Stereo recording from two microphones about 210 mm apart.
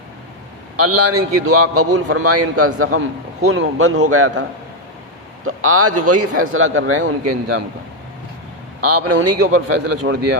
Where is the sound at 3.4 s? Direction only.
80° right.